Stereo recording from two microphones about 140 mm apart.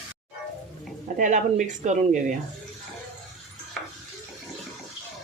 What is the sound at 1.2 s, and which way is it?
Speech, 60° right (ahead or behind).